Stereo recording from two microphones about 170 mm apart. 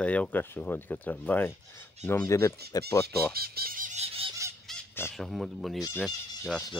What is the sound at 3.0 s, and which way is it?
Speech, 65° right (ahead or behind).